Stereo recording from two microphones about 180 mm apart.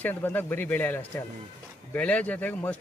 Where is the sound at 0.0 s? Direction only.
10° left (ahead or behind).